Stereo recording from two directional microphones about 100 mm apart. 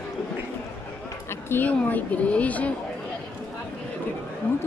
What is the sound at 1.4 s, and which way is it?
Speech, 20° left (ahead or behind).